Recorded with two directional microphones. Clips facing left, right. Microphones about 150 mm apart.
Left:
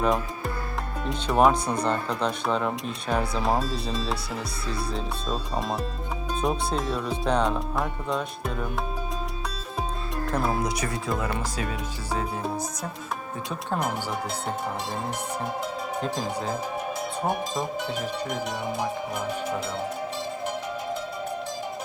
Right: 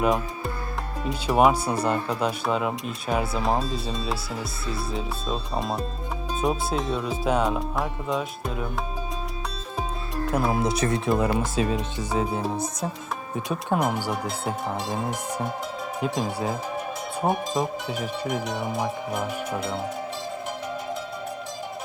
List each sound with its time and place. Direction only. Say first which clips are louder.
0.0 s speech: right 1 dB; centre (ahead or behind)
10.2 s speech: right 2 dB; centre (ahead or behind)
10.6 s speech: right 4 dB; 25° right (ahead or behind)
12.1 s music: right 4 dB; 10° right (ahead or behind)
13.7 s speech: right 4 dB; centre (ahead or behind)
16.0 s speech: right 4 dB; centre (ahead or behind)